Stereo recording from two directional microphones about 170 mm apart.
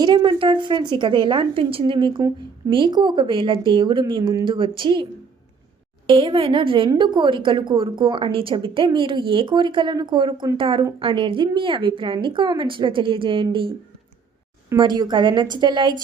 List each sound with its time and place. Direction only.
0.0 s a woman's voice: 25° right (ahead or behind)
6.1 s a woman's voice: 30° right (ahead or behind)
14.8 s a woman's voice: 25° right (ahead or behind)